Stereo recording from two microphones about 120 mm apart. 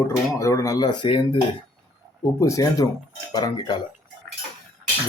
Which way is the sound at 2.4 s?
25° left (ahead or behind).